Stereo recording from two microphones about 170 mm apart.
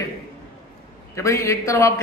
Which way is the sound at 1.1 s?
20° left (ahead or behind).